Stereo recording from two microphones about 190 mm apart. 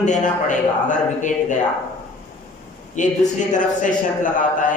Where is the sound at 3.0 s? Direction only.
40° left (ahead or behind).